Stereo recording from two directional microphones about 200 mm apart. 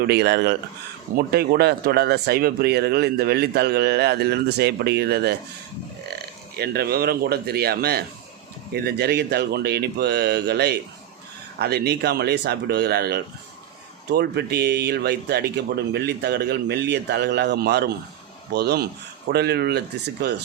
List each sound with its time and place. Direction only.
0.1 s speech: 55° right (ahead or behind)
6.6 s speech: 50° right (ahead or behind)